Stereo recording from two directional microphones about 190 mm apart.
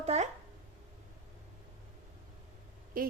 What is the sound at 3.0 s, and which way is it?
Speech, 50° right (ahead or behind).